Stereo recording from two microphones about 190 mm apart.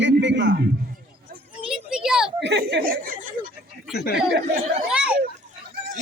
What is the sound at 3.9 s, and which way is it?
Speech, 55° left (ahead or behind).